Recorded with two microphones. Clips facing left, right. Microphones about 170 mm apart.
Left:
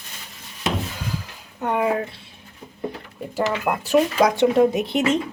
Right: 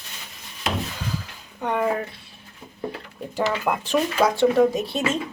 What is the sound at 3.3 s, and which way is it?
Speech, 5° left (ahead or behind).